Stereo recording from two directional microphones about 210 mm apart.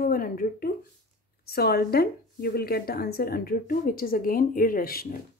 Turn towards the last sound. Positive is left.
turn(degrees=45)  # may be behind; listen again after turning